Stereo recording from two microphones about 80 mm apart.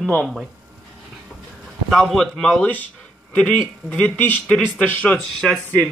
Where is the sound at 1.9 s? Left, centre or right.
Centre; by 5.2 s left.